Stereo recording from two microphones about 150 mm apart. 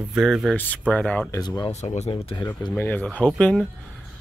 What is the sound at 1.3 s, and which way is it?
Speech, 25° left (ahead or behind).